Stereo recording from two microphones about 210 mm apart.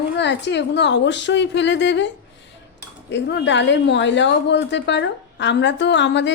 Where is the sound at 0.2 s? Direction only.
55° left (ahead or behind).